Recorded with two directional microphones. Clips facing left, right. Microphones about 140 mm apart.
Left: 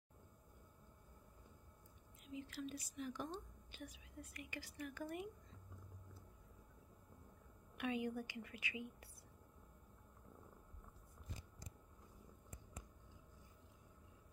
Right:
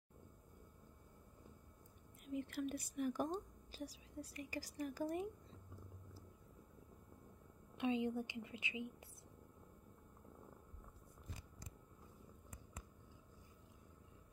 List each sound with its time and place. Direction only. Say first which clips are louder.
2.2 s a woman's voice: right 6 dB; 55° right (ahead or behind); by 5.3 s 35° right (ahead or behind)
7.7 s a woman's voice: right 4 dB; 25° right (ahead or behind)